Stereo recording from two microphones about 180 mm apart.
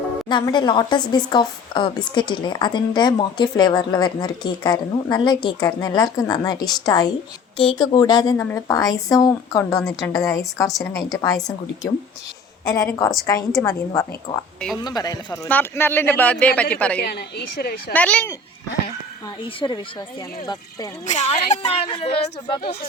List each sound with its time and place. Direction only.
0.3 s speech: 25° left (ahead or behind)
12.6 s speech: 20° left (ahead or behind)
17.0 s a woman's voice: 60° left (ahead or behind)
17.9 s speech: 10° left (ahead or behind)
19.5 s speech: 25° left (ahead or behind)
21.1 s a woman's voice: 40° left (ahead or behind)
21.7 s speech: 30° left (ahead or behind)